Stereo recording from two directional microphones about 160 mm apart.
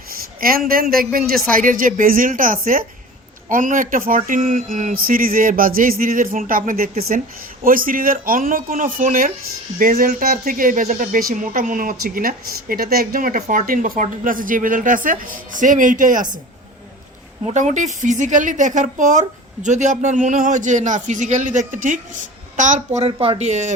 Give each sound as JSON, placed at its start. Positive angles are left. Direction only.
{"t": 0.1, "sound": "a sound", "side_deg": -65}
{"t": 0.7, "sound": "speech", "side_deg": -65}
{"t": 17.4, "sound": "a man's voice", "side_deg": -45}
{"t": 23.1, "sound": "a man's voice", "side_deg": -35}